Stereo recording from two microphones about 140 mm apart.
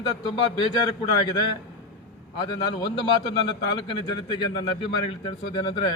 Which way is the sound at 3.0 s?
35° left (ahead or behind).